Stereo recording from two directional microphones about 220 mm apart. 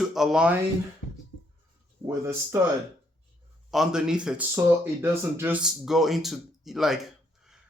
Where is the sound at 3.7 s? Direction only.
Centre (ahead or behind).